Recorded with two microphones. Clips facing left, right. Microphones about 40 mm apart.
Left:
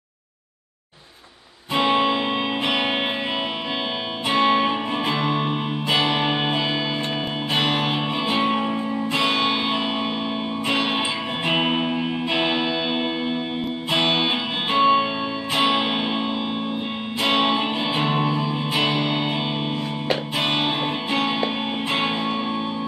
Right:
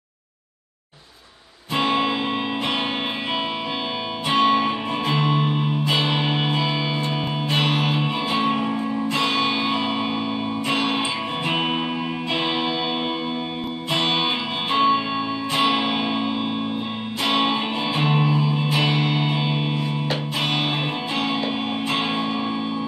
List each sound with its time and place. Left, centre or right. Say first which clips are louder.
4.4 s music: even; centre
20.4 s music: left 1 dB; left